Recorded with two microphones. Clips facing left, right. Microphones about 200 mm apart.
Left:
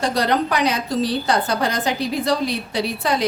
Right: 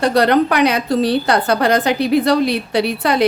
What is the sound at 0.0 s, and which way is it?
A woman's voice, 60° right (ahead or behind).